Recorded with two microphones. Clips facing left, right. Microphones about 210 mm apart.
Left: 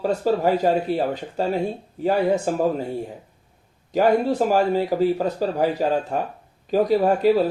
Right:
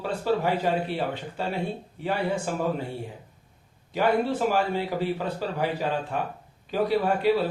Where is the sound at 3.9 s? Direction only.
40° left (ahead or behind).